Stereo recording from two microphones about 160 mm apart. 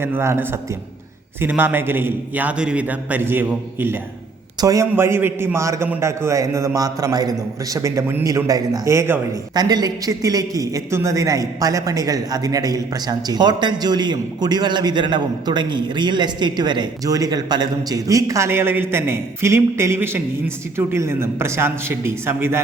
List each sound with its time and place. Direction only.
0.0 s a man's voice: 15° right (ahead or behind)